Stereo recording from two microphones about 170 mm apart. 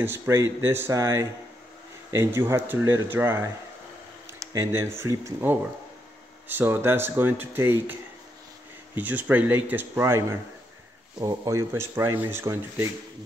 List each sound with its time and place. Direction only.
0.0 s speech: 15° right (ahead or behind)
8.9 s speech: 10° right (ahead or behind)